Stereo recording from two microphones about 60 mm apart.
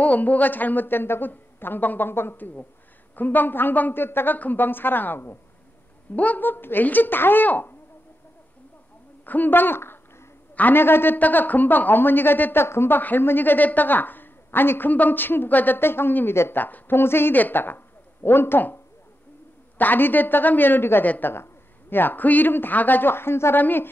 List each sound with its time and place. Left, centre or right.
0.0 s a woman's voice: left
6.1 s a woman's voice: left
9.2 s a woman's voice: left
19.8 s a woman's voice: left
23.5 s a woman's voice: left